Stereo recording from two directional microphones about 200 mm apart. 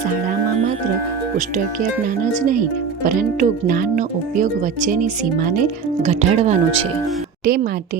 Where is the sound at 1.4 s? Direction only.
40° right (ahead or behind).